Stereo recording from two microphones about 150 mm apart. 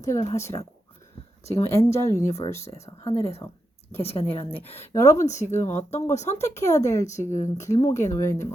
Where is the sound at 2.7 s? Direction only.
45° left (ahead or behind).